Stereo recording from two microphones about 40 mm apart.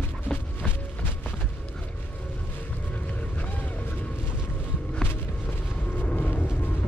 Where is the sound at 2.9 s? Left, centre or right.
Left.